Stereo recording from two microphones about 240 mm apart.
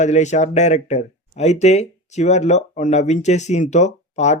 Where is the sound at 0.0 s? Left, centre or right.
Left.